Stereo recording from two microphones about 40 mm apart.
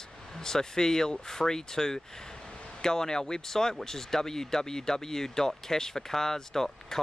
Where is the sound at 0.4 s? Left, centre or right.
Centre.